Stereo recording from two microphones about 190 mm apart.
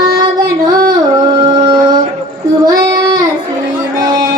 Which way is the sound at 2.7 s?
20° right (ahead or behind).